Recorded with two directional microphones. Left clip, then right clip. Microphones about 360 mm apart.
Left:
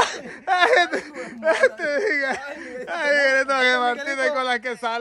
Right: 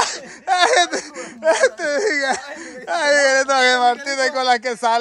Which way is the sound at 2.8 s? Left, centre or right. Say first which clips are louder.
Right 4 dB; centre.